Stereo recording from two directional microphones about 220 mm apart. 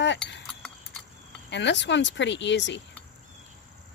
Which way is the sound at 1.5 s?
55° left (ahead or behind).